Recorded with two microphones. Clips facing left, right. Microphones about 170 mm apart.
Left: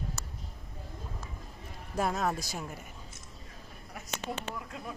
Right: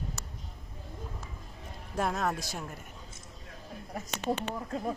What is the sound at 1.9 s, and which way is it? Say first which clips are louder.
Speech: even; centre (ahead or behind).